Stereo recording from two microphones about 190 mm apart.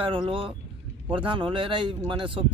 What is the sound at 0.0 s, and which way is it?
Speech, 25° right (ahead or behind).